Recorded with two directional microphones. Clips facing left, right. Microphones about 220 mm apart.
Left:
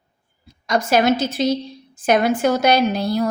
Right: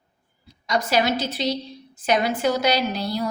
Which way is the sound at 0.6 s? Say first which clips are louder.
Left 5 dB; 50° left (ahead or behind).